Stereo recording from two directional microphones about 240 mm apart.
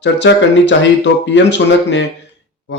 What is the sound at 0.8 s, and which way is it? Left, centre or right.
Speech, left.